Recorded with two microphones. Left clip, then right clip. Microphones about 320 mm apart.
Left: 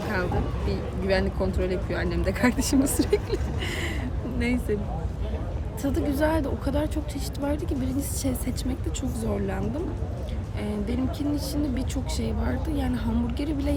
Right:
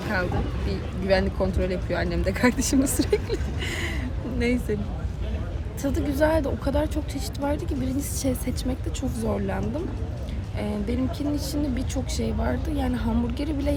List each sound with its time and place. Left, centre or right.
0.7 s speech: centre
5.8 s speech: centre